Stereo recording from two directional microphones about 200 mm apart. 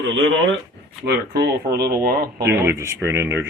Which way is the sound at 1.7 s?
50° right (ahead or behind).